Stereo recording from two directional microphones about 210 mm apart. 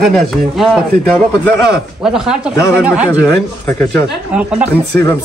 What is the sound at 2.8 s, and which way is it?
Speech, 5° right (ahead or behind).